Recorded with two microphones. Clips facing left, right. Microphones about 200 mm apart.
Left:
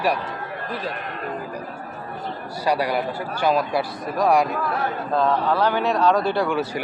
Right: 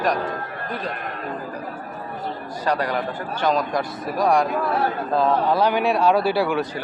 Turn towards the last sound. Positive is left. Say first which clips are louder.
# right 1 dB
turn(degrees=-5)  # may be behind; listen again after turning